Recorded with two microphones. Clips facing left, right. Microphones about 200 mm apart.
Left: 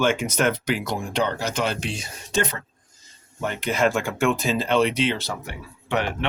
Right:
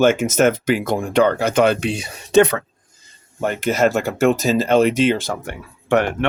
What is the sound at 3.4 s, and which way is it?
Speech, 45° right (ahead or behind).